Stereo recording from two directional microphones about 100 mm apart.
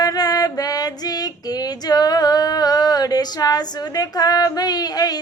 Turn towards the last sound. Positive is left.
turn(degrees=40)  # may be behind; listen again after turning